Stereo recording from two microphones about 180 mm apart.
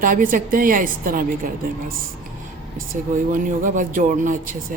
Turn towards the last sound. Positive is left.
turn(degrees=-45)  # may be behind; listen again after turning